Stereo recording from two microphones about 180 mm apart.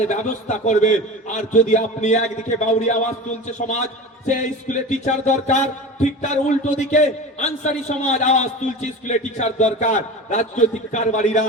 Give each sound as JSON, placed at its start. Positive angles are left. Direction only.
{"t": 0.1, "sound": "music", "side_deg": 40}